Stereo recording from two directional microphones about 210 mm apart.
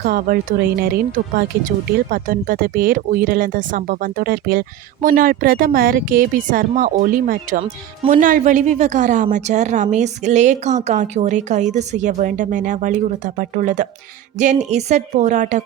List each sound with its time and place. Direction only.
0.0 s speech: 45° right (ahead or behind)